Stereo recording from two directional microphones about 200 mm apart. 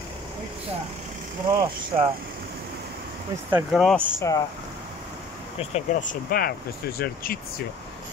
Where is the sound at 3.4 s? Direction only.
10° right (ahead or behind).